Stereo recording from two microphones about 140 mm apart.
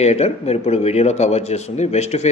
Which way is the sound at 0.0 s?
50° left (ahead or behind).